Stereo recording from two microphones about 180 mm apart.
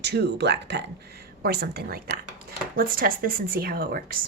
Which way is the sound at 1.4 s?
60° right (ahead or behind).